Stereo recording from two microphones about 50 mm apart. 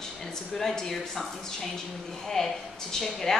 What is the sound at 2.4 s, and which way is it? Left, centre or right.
A woman's voice, centre.